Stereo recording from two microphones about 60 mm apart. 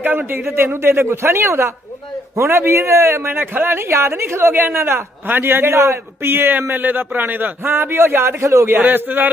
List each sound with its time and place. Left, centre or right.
0.0 s a man's voice: right
8.7 s a man's voice: right